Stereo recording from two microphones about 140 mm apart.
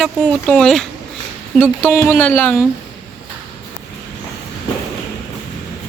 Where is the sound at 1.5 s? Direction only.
10° right (ahead or behind).